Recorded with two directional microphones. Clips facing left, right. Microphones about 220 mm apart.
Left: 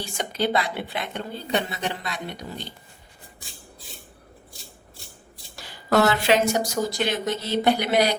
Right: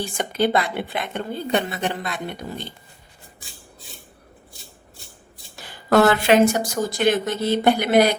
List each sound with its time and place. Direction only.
0.0 s a woman's voice: 55° right (ahead or behind)
5.9 s a woman's voice: 50° right (ahead or behind)